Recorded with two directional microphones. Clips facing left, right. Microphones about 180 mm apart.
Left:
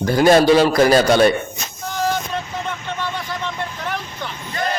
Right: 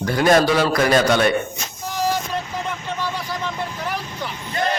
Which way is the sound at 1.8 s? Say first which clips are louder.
Left 1 dB; 5° right (ahead or behind).